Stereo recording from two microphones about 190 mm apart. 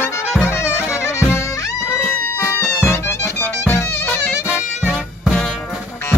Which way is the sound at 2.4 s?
15° left (ahead or behind).